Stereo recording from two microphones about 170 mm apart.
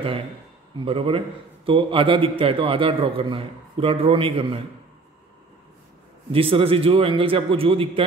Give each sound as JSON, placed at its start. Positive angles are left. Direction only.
{"t": 0.8, "sound": "a man's voice", "side_deg": -35}
{"t": 6.3, "sound": "a man's voice", "side_deg": -35}